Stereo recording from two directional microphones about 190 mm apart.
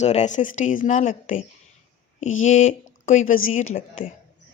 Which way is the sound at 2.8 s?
45° left (ahead or behind).